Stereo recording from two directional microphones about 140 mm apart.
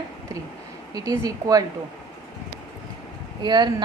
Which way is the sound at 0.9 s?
25° right (ahead or behind).